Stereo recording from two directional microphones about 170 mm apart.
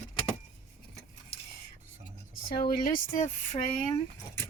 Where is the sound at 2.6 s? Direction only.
55° left (ahead or behind).